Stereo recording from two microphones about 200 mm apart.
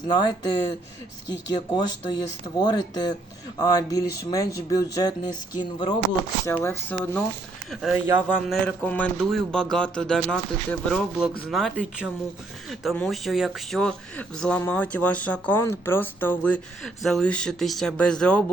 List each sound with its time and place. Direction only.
0.1 s speech: 20° left (ahead or behind)
6.4 s speech: 15° left (ahead or behind)
7.7 s a man's voice: 5° right (ahead or behind)